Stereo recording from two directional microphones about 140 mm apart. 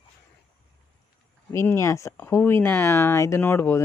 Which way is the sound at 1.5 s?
20° left (ahead or behind).